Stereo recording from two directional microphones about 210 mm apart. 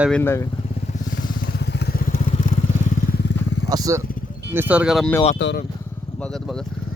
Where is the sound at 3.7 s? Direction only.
15° right (ahead or behind); by 5.1 s centre (ahead or behind).